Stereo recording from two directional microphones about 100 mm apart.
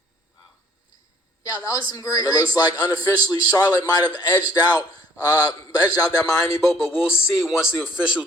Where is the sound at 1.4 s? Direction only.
35° left (ahead or behind).